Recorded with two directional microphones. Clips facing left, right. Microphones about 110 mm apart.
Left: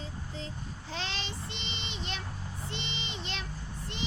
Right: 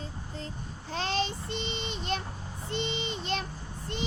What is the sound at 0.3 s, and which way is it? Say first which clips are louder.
Child singing: right 2 dB; 45° right (ahead or behind).